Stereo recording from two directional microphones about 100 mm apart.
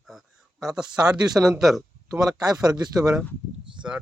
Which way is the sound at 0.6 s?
5° right (ahead or behind).